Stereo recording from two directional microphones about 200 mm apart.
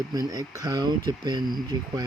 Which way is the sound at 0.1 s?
20° right (ahead or behind).